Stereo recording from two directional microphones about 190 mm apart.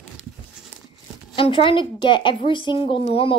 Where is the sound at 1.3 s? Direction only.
30° left (ahead or behind).